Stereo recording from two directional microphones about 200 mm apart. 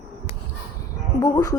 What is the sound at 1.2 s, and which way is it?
Speech, 20° left (ahead or behind).